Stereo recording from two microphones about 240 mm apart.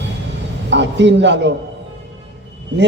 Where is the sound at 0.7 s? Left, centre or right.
Right.